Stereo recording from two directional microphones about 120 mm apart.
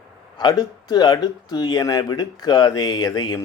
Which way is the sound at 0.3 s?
35° left (ahead or behind).